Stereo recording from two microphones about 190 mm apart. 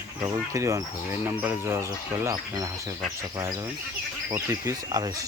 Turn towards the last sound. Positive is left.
turn(degrees=-20)  # may be behind; listen again after turning